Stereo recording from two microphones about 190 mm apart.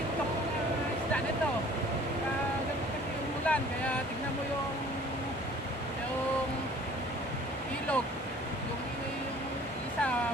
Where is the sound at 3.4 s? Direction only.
5° left (ahead or behind).